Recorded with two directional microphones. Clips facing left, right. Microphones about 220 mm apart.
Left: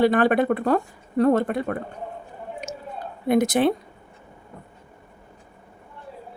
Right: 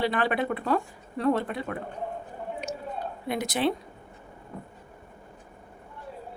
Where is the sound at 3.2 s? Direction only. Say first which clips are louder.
Left 9 dB; 50° left (ahead or behind).